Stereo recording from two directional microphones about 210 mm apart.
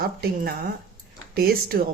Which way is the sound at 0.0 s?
45° right (ahead or behind).